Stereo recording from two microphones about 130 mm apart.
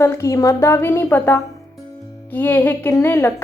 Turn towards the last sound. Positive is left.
turn(degrees=20)  # may be behind; listen again after turning